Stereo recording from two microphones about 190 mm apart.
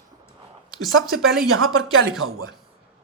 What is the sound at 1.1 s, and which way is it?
Speech, centre (ahead or behind).